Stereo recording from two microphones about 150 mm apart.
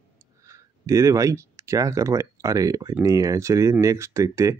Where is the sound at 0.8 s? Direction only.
20° right (ahead or behind).